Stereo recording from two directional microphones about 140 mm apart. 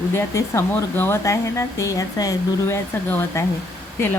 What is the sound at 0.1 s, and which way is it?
Speech, 20° left (ahead or behind).